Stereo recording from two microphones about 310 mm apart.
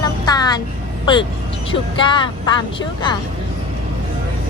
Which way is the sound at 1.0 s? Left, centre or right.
Centre.